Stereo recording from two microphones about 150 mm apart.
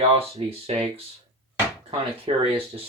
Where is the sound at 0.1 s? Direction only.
40° right (ahead or behind).